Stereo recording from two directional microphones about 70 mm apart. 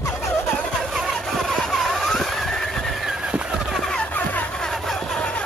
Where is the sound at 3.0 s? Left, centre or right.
Centre.